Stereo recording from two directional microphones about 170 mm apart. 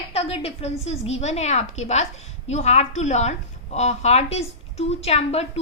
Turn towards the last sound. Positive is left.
turn(degrees=40)  # may be behind; listen again after turning